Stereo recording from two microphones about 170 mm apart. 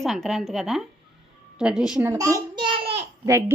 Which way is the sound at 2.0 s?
20° right (ahead or behind).